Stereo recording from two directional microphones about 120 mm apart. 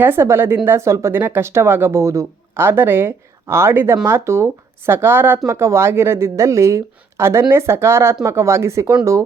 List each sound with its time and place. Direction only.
0.0 s speech: 20° right (ahead or behind)